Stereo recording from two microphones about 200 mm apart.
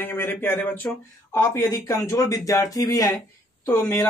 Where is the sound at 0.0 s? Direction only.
10° left (ahead or behind).